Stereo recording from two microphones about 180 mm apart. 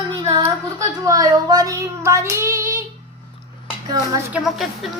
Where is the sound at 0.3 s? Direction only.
20° right (ahead or behind).